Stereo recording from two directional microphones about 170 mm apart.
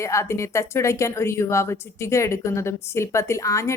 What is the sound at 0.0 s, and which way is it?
A woman's voice, 15° left (ahead or behind).